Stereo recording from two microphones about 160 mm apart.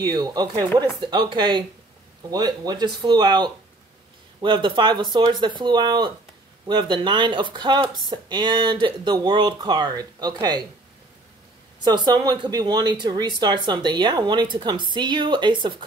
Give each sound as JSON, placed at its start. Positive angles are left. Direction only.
{"t": 0.0, "sound": "speech", "side_deg": -25}
{"t": 11.8, "sound": "speech", "side_deg": -25}